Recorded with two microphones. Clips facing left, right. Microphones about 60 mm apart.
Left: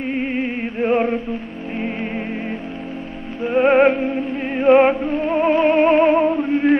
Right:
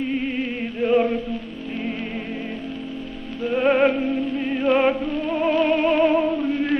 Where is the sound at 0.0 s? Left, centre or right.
Left.